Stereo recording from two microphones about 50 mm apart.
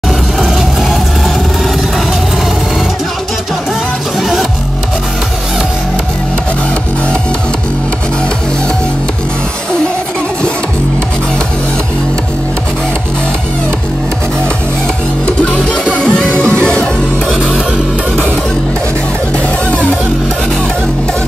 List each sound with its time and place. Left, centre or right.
15.2 s music: left